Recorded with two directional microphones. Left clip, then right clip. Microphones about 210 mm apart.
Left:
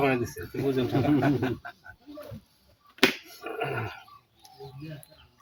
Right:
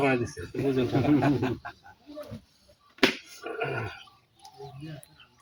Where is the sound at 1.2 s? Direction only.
10° right (ahead or behind).